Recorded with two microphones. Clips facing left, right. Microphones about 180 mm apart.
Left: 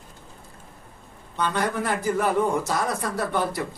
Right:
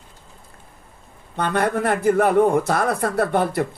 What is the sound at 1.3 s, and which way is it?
Speech, 60° right (ahead or behind).